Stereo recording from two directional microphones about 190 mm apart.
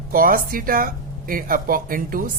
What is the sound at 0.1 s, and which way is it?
Speech, 50° right (ahead or behind).